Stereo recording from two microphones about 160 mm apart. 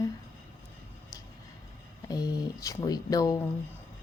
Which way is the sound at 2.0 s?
25° left (ahead or behind).